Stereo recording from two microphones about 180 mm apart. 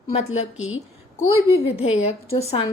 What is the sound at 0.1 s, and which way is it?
Speech, 40° left (ahead or behind).